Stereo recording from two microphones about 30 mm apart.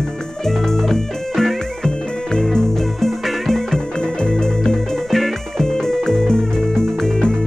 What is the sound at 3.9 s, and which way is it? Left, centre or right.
Music, left.